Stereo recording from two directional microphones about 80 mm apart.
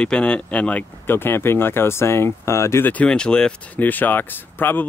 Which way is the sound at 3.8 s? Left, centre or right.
Left.